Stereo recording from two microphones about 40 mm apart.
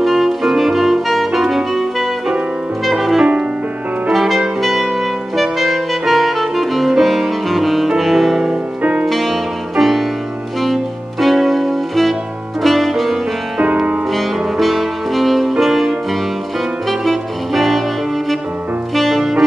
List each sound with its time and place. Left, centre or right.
0.0 s music: centre
13.6 s music: right
14.1 s music: centre
17.0 s saxophone: centre
18.9 s music: centre